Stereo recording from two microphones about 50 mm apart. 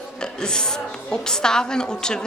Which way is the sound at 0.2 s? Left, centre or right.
Centre.